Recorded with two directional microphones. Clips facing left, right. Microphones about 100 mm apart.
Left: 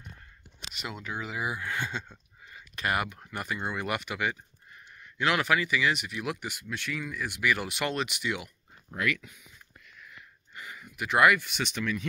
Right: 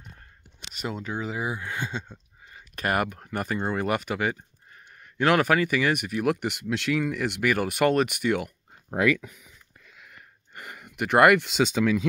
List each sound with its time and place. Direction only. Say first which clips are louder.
0.7 s speech: right 5 dB; 35° right (ahead or behind); by 2.1 s 20° right (ahead or behind)
2.7 s speech: right 4 dB; 45° right (ahead or behind)
6.4 s speech: right 9 dB; 70° right (ahead or behind)
7.4 s speech: right 7 dB; 50° right (ahead or behind)
10.1 s a sound: right 2 dB; 55° right (ahead or behind); by 11.6 s 80° right